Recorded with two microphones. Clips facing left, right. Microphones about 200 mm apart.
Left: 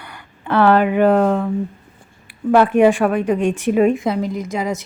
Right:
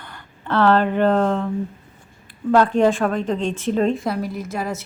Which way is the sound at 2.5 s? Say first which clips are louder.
Left 3 dB; 15° left (ahead or behind).